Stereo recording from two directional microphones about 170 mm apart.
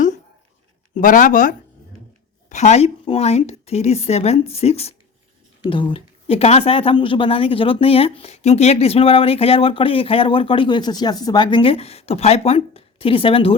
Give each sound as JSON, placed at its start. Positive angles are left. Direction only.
{"t": 0.9, "sound": "speech", "side_deg": 50}